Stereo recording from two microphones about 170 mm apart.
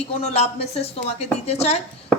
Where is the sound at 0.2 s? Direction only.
40° left (ahead or behind).